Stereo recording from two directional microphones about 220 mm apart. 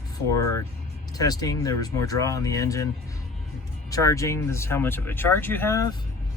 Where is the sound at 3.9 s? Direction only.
15° left (ahead or behind).